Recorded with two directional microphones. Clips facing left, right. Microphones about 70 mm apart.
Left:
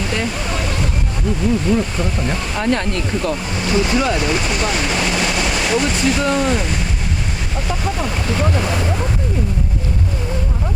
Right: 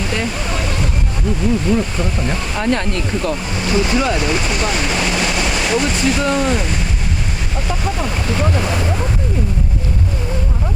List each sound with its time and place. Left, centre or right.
0.1 s waterfall: centre
1.6 s speech: right